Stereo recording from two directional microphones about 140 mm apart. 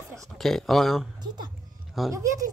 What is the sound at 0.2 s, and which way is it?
Speech, centre (ahead or behind).